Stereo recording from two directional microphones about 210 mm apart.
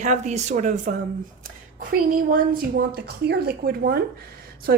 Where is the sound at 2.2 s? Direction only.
40° right (ahead or behind).